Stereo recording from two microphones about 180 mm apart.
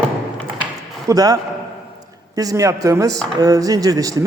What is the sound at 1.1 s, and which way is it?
A man's voice, 20° right (ahead or behind).